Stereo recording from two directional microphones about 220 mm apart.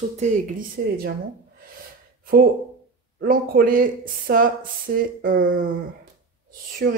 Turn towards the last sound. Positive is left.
turn(degrees=-45)  # may be behind; listen again after turning